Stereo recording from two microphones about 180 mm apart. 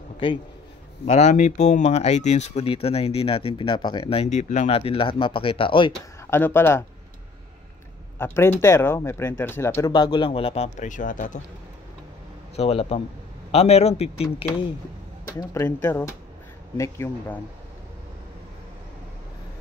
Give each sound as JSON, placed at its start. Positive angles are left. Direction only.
{"t": 1.0, "sound": "speech", "side_deg": 40}
{"t": 6.3, "sound": "speech", "side_deg": 10}
{"t": 8.2, "sound": "speech", "side_deg": 15}
{"t": 12.5, "sound": "speech", "side_deg": 35}
{"t": 15.2, "sound": "speech", "side_deg": 15}